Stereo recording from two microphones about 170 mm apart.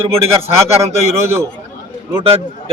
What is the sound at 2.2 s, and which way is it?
Speech, 35° right (ahead or behind).